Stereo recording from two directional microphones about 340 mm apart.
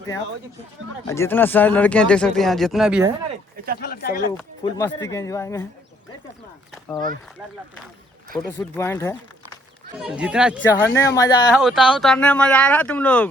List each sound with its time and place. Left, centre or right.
1.0 s speech: centre
3.8 s speech: left
4.3 s speech: centre
6.8 s speech: centre
8.3 s speech: centre
10.0 s speech: centre
10.7 s speech: centre
11.5 s speech: centre